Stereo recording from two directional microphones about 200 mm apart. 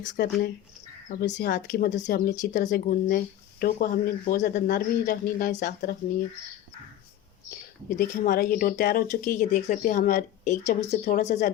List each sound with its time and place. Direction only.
0.1 s speech: 55° left (ahead or behind)
1.5 s a woman's voice: 40° left (ahead or behind)
2.0 s speech: 55° left (ahead or behind)
2.3 s speech: 40° left (ahead or behind)
7.9 s a woman's voice: 40° left (ahead or behind)